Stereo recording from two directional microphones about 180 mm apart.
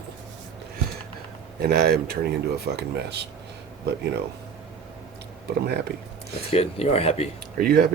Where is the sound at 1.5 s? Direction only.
60° right (ahead or behind).